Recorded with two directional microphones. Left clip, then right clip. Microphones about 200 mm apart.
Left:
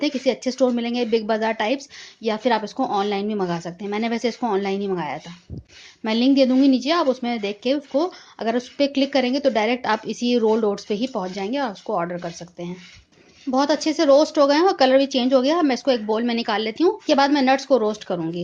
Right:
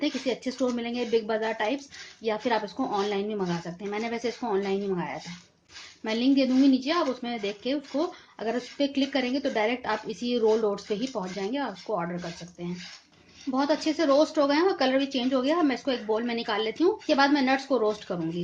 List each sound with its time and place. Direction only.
0.0 s speech: 45° left (ahead or behind)
13.5 s speech: 40° left (ahead or behind)